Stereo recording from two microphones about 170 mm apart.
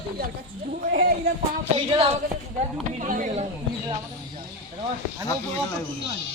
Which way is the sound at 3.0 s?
50° right (ahead or behind).